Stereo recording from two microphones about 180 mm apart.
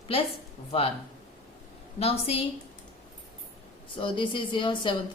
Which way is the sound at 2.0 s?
35° left (ahead or behind).